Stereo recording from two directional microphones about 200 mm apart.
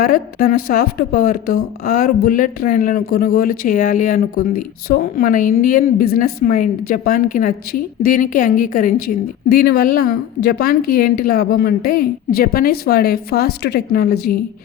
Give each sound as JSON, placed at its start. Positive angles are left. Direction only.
{"t": 0.0, "sound": "speech", "side_deg": 45}